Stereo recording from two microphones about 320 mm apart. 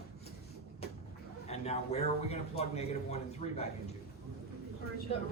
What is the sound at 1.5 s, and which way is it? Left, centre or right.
A man's voice, centre.